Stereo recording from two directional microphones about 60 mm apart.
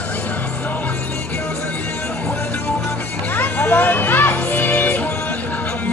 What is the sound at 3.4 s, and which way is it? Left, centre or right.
Music, left.